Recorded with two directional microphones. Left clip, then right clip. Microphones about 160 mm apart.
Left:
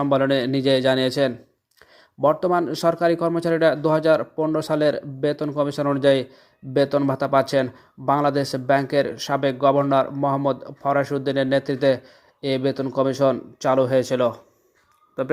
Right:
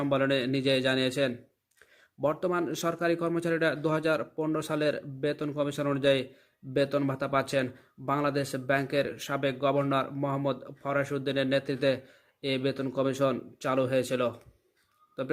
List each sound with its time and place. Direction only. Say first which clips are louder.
0.0 s speech: left 8 dB; 20° left (ahead or behind)